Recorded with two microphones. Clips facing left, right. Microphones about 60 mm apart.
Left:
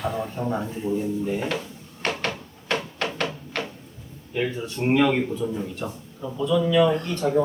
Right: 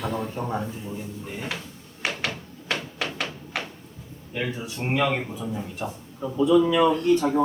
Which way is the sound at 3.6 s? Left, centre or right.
Centre.